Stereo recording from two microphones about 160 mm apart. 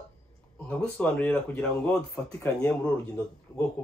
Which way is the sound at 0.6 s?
10° left (ahead or behind).